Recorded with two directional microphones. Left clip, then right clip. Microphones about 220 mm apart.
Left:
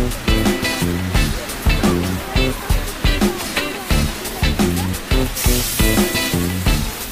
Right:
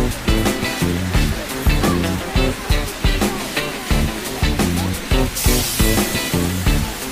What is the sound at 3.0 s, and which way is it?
Music, centre (ahead or behind).